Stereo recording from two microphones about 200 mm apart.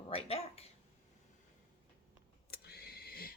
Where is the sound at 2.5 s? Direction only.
50° left (ahead or behind).